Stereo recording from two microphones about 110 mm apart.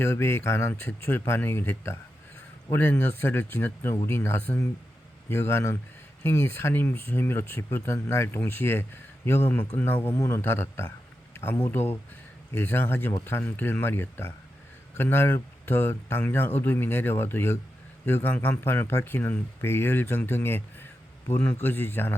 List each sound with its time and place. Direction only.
0.0 s speech: 20° left (ahead or behind)